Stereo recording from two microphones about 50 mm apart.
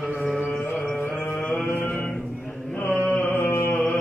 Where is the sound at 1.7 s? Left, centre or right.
Left.